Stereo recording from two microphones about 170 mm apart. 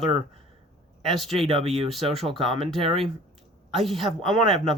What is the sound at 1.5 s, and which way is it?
Speech, 35° right (ahead or behind).